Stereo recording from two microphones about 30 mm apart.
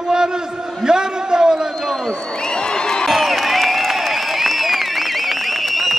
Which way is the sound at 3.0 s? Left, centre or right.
Centre.